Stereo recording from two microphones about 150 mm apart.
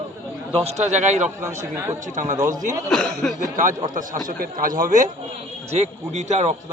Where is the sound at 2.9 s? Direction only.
5° left (ahead or behind).